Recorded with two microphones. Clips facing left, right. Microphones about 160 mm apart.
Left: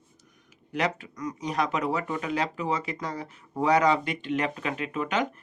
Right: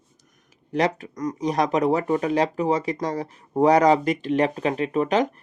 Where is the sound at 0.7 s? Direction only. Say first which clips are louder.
Right 6 dB; 40° right (ahead or behind).